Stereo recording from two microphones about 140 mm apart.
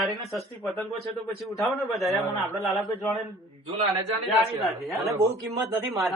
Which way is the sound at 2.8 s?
20° left (ahead or behind).